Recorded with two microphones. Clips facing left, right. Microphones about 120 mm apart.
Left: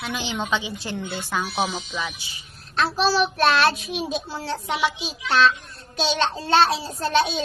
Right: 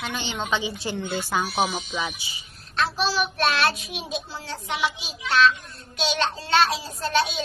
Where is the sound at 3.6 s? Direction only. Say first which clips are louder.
Left 4 dB; 35° left (ahead or behind).